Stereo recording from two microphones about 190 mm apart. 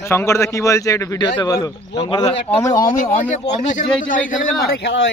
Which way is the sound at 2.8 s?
40° left (ahead or behind).